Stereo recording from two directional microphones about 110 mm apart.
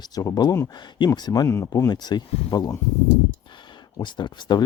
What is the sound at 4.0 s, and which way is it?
Speech, 45° left (ahead or behind).